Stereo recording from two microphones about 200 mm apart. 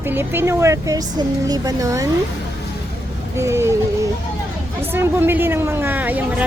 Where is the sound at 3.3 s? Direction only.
15° right (ahead or behind).